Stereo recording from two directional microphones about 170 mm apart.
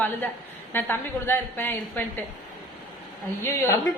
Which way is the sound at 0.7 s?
10° left (ahead or behind).